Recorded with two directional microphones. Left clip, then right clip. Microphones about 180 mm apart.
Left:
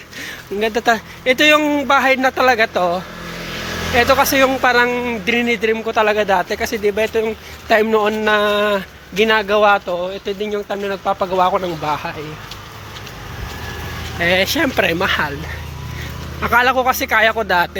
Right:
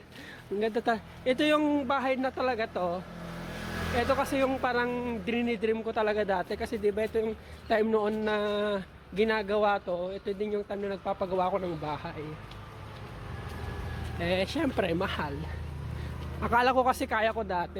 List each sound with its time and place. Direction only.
0.6 s speech: 5° right (ahead or behind)
14.2 s speech: centre (ahead or behind)
16.4 s speech: 15° right (ahead or behind)
17.3 s speech: centre (ahead or behind)